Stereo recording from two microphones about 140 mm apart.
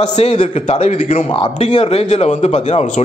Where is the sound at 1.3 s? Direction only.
40° left (ahead or behind).